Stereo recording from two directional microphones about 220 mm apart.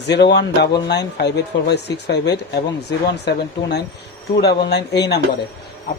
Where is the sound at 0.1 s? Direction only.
50° left (ahead or behind).